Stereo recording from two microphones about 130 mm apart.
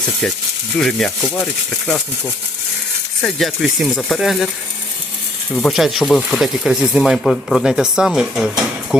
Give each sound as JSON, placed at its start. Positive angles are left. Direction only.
{"t": 0.8, "sound": "speech", "side_deg": 5}
{"t": 3.2, "sound": "speech", "side_deg": 0}
{"t": 5.5, "sound": "speech", "side_deg": 0}